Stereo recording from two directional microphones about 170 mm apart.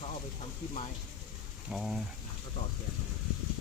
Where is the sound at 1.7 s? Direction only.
Centre (ahead or behind).